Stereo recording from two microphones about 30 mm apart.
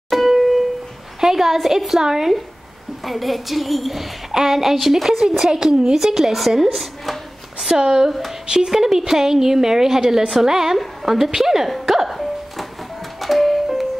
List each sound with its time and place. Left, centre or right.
0.1 s music: centre
1.2 s a sound: centre
2.0 s a woman's voice: centre
3.0 s a woman's voice: centre
4.3 s a woman's voice: centre
5.5 s a child's voice: right
5.9 s a woman's voice: centre
8.1 s a woman's voice: centre
8.5 s a woman's voice: centre
11.7 s music: centre